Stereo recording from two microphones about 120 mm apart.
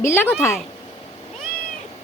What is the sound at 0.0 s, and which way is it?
Speech, 20° left (ahead or behind).